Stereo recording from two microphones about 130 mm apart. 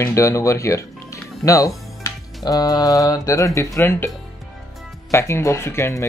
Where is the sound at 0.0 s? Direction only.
25° left (ahead or behind).